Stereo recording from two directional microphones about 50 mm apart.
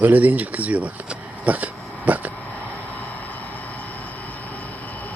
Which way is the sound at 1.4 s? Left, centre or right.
Right.